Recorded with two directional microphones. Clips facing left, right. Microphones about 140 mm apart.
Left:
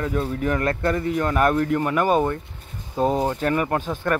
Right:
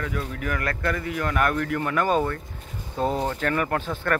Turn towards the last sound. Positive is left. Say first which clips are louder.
# left 2 dB
turn(degrees=15)  # may be behind; listen again after turning